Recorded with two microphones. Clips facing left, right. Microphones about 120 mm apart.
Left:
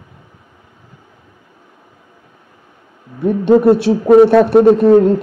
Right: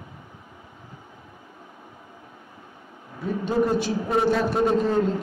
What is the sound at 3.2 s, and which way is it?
A man's voice, 65° left (ahead or behind).